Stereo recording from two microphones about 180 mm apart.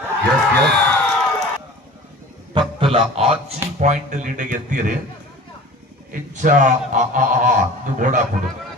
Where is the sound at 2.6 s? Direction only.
30° right (ahead or behind).